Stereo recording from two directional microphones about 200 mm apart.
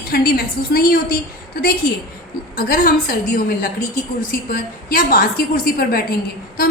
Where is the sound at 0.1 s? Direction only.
50° left (ahead or behind).